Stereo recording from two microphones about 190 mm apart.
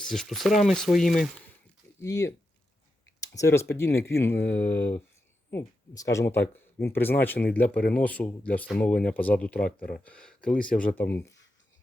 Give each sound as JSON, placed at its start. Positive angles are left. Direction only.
{"t": 0.0, "sound": "speech", "side_deg": 0}
{"t": 2.0, "sound": "speech", "side_deg": 15}